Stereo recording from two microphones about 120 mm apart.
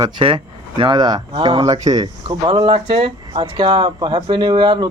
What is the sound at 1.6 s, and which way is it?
Speech, 30° right (ahead or behind).